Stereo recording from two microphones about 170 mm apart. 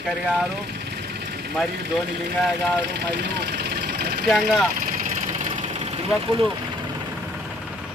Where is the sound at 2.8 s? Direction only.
80° right.